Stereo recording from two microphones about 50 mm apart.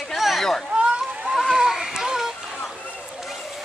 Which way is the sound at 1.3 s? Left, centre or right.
Centre.